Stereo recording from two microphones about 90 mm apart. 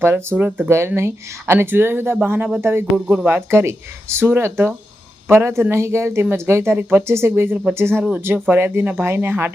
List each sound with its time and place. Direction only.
0.0 s speech: 25° right (ahead or behind)
2.9 s speech: 10° right (ahead or behind)
3.2 s speech: 25° right (ahead or behind)